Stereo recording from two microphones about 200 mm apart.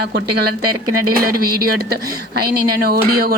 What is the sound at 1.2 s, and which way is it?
Speech, 50° right (ahead or behind).